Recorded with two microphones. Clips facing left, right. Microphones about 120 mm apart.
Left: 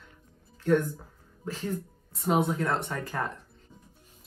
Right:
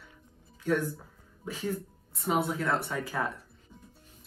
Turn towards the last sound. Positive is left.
turn(degrees=-10)  # may be behind; listen again after turning